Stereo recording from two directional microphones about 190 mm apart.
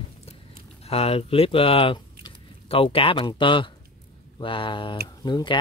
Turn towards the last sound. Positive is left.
turn(degrees=25)  # may be behind; listen again after turning